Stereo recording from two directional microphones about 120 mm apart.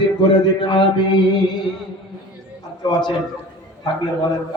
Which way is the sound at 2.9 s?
35° left (ahead or behind).